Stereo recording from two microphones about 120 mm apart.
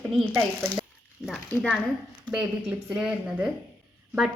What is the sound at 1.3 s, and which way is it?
Speech, 5° left (ahead or behind).